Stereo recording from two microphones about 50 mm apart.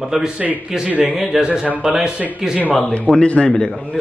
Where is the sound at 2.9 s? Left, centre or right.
Left.